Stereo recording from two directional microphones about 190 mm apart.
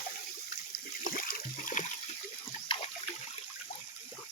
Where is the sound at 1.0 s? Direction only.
50° left (ahead or behind).